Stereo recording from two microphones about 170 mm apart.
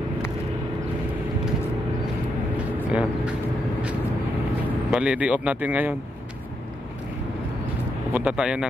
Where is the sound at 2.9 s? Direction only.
5° right (ahead or behind).